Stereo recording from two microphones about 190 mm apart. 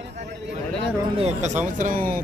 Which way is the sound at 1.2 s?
40° right (ahead or behind).